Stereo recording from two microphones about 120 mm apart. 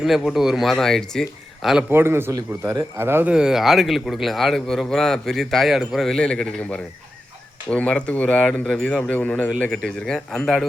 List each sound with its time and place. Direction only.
0.0 s speech: centre (ahead or behind)
1.9 s a man's voice: 20° right (ahead or behind)
3.3 s speech: 5° right (ahead or behind)